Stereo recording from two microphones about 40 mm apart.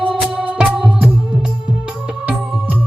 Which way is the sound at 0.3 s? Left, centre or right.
Right.